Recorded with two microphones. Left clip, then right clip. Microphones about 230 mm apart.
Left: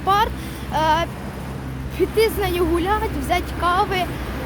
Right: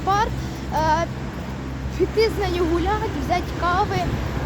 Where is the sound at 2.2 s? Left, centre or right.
Centre.